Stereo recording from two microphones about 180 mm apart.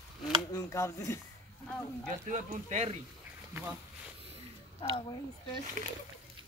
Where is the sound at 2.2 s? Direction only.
40° right (ahead or behind).